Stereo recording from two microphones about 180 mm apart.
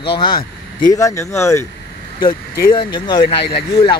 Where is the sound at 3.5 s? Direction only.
65° left (ahead or behind).